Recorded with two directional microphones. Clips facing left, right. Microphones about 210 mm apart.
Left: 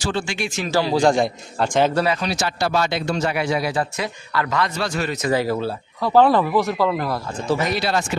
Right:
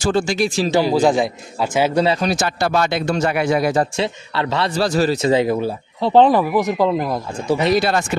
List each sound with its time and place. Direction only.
0.0 s speech: 40° right (ahead or behind)
0.7 s a man's voice: 15° right (ahead or behind)
2.1 s speech: 50° right (ahead or behind)
3.9 s a man's voice: 25° right (ahead or behind)
7.7 s speech: 50° right (ahead or behind)